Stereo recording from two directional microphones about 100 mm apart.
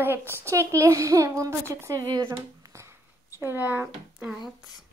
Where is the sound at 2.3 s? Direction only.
30° right (ahead or behind).